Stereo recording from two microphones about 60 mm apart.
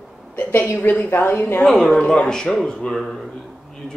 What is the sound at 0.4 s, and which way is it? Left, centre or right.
Speech, left.